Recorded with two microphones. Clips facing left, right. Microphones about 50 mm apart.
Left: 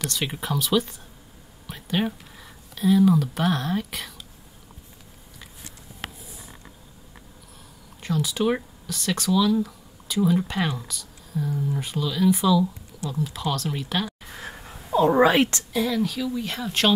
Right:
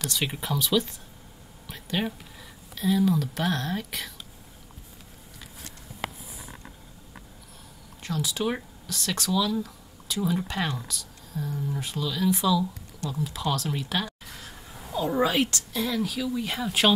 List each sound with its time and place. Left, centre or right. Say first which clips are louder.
0.0 s speech: left 1 dB; centre
8.0 s speech: left 4 dB; centre
14.4 s a sound: left 7 dB; left
15.0 s a woman's voice: left 6 dB; left
15.7 s speech: left 4 dB; centre